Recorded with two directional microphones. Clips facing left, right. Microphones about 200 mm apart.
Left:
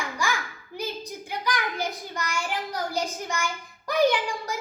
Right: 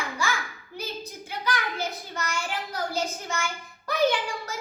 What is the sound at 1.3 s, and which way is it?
A child's voice, 15° left (ahead or behind).